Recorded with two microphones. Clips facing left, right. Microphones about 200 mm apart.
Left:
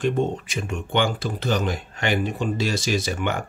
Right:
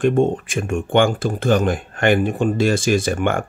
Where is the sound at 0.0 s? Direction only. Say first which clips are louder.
Right 6 dB; 50° right (ahead or behind).